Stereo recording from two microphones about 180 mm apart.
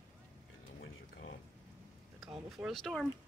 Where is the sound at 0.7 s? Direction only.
60° left (ahead or behind).